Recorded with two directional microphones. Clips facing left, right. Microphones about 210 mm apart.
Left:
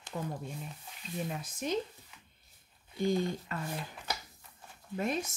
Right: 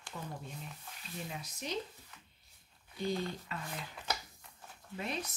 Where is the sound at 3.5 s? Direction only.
45° left (ahead or behind).